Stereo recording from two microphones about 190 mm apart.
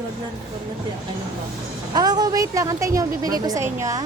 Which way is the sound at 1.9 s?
20° right (ahead or behind).